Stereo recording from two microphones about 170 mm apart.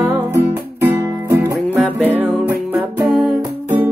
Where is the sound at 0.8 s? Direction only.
15° right (ahead or behind).